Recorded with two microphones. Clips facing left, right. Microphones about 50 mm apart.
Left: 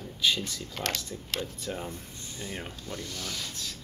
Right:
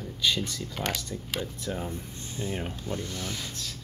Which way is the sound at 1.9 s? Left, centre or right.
Right.